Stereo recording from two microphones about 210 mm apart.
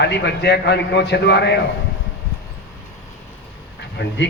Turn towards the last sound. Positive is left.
turn(degrees=55)  # may be behind; listen again after turning